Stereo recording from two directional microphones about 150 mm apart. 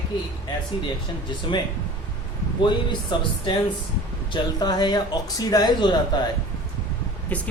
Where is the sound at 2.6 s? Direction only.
30° left (ahead or behind).